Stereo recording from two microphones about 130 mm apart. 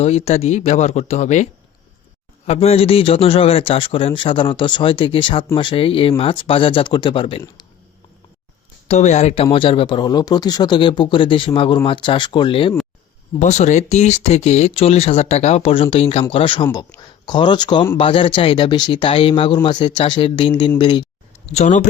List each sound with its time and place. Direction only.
0.0 s speech: 50° left (ahead or behind)
2.5 s a man's voice: 50° left (ahead or behind)
8.9 s speech: 60° left (ahead or behind); by 12.7 s 40° left (ahead or behind)
13.4 s speech: 65° left (ahead or behind); by 16.6 s 40° left (ahead or behind)
16.9 s speech: 10° left (ahead or behind)
17.2 s speech: 35° left (ahead or behind)
21.4 s speech: 60° left (ahead or behind)